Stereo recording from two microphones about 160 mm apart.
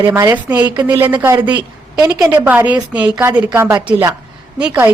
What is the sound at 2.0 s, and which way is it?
A woman's voice, 15° right (ahead or behind).